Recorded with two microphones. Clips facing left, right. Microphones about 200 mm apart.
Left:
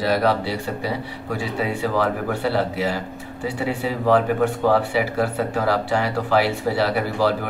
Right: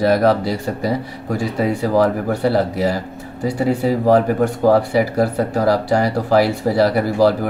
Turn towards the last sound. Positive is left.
turn(degrees=-40)  # may be behind; listen again after turning